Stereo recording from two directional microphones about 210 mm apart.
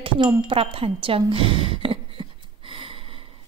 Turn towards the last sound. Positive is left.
turn(degrees=-25)  # may be behind; listen again after turning